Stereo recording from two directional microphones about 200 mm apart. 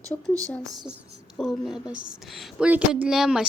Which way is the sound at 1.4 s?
Centre (ahead or behind).